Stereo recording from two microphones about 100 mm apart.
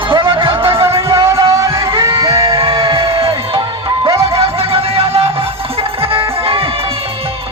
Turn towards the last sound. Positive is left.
turn(degrees=-65)  # may be behind; listen again after turning